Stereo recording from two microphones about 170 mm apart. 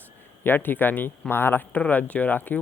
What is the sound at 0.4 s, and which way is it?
Speech, 10° left (ahead or behind).